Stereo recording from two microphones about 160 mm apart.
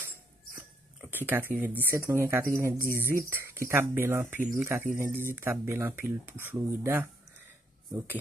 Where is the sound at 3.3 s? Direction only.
15° right (ahead or behind).